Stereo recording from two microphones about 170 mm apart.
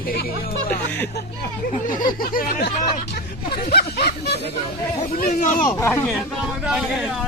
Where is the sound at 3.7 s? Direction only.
65° left (ahead or behind).